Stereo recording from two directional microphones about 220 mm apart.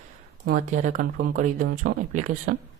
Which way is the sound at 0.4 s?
40° right (ahead or behind).